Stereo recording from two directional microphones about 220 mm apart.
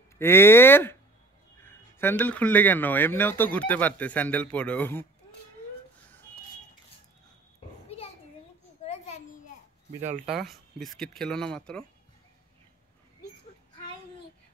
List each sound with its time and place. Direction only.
0.2 s speech: 10° left (ahead or behind)
8.8 s a sound: 30° left (ahead or behind)
9.9 s speech: 30° right (ahead or behind)
10.2 s speech: centre (ahead or behind)